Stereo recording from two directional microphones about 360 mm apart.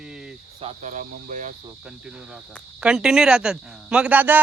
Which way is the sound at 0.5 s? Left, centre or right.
Centre.